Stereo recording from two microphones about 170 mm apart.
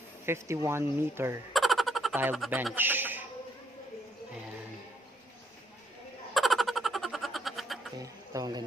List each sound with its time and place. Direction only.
0.3 s speech: 15° right (ahead or behind)
1.5 s a sound: centre (ahead or behind)
2.3 s speech: centre (ahead or behind)
2.7 s a man's voice: 10° right (ahead or behind)
6.3 s a sound: centre (ahead or behind)
8.3 s a man's voice: 20° right (ahead or behind)